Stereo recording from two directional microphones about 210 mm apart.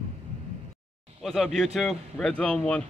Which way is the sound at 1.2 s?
Centre (ahead or behind).